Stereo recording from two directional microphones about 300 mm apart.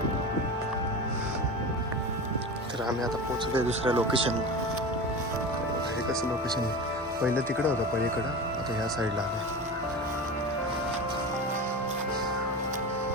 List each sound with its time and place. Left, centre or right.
3.7 s speech: centre
7.3 s speech: centre